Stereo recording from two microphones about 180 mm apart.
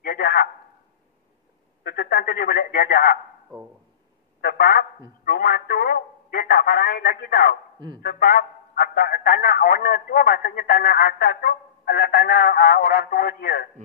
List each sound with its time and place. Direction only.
0.0 s a sound: 55° left (ahead or behind)
1.8 s a man's voice: 60° left (ahead or behind)
4.4 s a man's voice: 55° left (ahead or behind)